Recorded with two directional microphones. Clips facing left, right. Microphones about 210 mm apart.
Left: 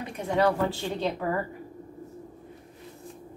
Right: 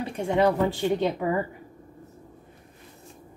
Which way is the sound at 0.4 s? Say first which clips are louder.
Right 2 dB; 20° right (ahead or behind).